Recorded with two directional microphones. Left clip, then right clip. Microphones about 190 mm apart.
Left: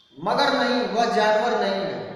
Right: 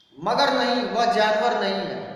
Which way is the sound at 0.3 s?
10° right (ahead or behind).